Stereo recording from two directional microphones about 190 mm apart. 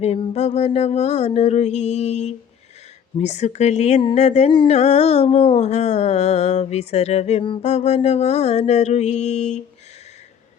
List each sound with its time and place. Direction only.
0.0 s speech: 30° left (ahead or behind)